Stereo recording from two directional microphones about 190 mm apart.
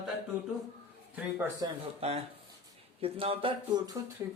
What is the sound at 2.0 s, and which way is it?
Speech, 35° right (ahead or behind).